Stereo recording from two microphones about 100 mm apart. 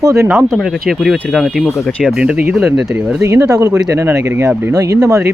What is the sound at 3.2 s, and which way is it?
Speech, 30° right (ahead or behind).